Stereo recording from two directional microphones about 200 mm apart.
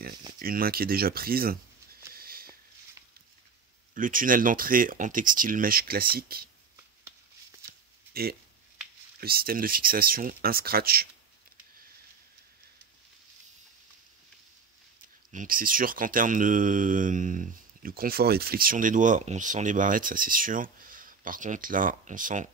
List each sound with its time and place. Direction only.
0.4 s a sound: 45° right (ahead or behind)
3.9 s speech: 40° right (ahead or behind)
8.1 s speech: 50° right (ahead or behind)
15.3 s speech: 45° right (ahead or behind)